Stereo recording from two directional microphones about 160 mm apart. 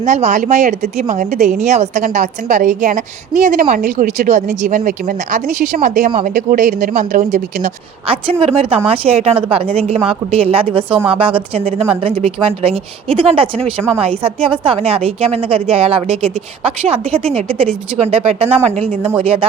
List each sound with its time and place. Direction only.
0.0 s speech: 45° right (ahead or behind)
8.0 s a woman's voice: 35° right (ahead or behind)